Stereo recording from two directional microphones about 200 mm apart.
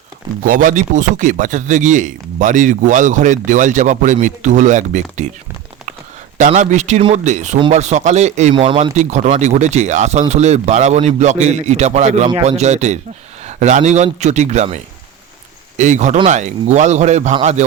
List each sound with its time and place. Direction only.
0.4 s speech: 40° right (ahead or behind)
6.3 s speech: 40° right (ahead or behind)
15.8 s speech: 35° right (ahead or behind)